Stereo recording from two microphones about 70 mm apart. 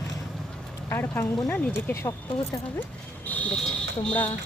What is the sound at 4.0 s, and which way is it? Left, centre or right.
Speech, centre.